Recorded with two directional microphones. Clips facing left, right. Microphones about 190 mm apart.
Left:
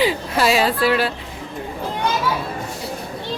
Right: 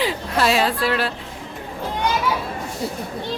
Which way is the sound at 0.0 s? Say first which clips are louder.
Left 2 dB; centre (ahead or behind).